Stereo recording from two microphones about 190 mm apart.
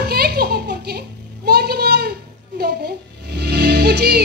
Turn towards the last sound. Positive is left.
turn(degrees=-60)  # may be behind; listen again after turning